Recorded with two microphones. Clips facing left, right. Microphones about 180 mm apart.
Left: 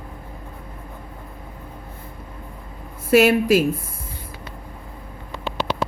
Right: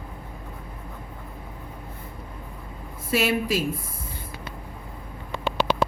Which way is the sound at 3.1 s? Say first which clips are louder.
Left 9 dB; 65° left (ahead or behind).